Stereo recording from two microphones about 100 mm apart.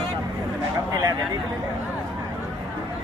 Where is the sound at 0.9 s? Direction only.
40° right (ahead or behind).